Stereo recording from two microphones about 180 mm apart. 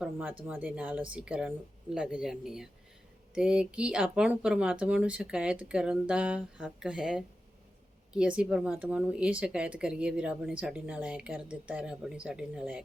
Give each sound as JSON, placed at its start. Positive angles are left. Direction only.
{"t": 0.0, "sound": "a woman's voice", "side_deg": -10}